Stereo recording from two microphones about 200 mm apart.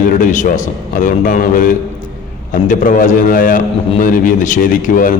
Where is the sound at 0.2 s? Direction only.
40° left (ahead or behind).